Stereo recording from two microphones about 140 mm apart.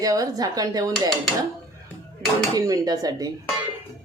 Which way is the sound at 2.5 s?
25° right (ahead or behind).